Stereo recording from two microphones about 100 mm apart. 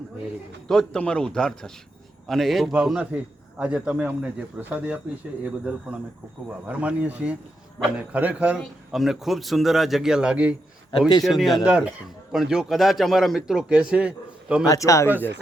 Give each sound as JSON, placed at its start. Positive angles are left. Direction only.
{"t": 0.7, "sound": "a man's voice", "side_deg": 10}
{"t": 8.5, "sound": "a man's voice", "side_deg": 0}
{"t": 11.2, "sound": "a man's voice", "side_deg": 0}
{"t": 14.7, "sound": "speech", "side_deg": 30}